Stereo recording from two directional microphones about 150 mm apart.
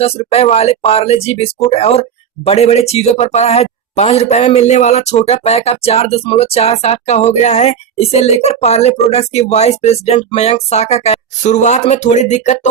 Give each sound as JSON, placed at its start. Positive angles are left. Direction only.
{"t": 0.0, "sound": "speech", "side_deg": 40}